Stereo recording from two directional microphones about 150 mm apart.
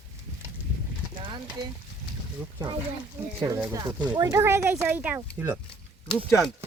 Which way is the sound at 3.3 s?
20° right (ahead or behind).